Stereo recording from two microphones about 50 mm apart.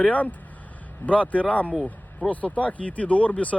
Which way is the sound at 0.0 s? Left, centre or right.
Left.